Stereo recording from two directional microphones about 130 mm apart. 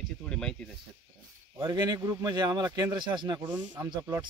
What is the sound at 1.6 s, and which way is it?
A man's voice, 35° right (ahead or behind).